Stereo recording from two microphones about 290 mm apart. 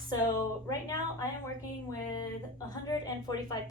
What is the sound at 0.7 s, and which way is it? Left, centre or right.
Speech, centre.